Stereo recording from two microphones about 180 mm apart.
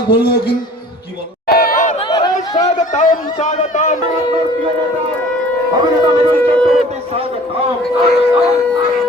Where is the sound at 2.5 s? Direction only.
40° left (ahead or behind).